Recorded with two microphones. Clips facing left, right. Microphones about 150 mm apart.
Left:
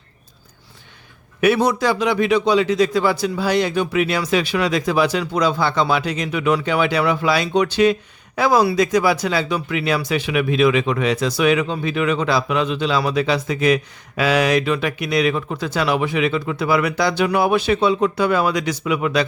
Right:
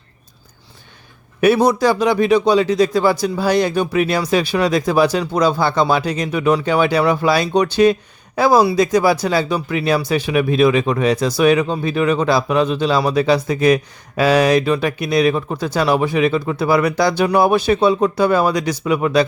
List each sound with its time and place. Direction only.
1.4 s speech: 35° right (ahead or behind)